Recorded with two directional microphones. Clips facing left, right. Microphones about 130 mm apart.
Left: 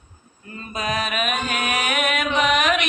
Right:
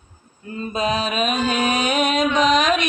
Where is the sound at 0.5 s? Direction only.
30° right (ahead or behind).